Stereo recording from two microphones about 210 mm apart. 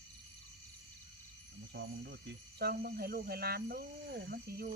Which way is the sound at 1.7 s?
50° right (ahead or behind).